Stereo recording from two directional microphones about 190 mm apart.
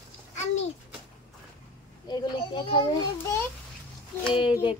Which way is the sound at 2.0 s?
25° left (ahead or behind).